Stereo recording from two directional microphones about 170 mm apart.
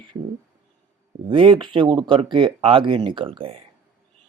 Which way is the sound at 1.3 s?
30° right (ahead or behind).